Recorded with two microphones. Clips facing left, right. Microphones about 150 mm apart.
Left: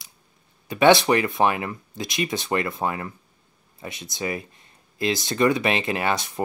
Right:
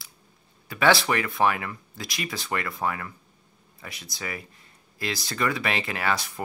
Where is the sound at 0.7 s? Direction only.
20° left (ahead or behind).